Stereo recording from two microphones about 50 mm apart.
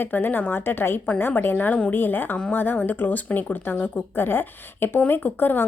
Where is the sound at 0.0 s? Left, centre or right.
Left.